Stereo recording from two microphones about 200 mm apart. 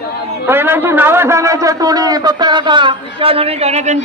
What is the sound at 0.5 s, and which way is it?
A man's voice, 10° right (ahead or behind).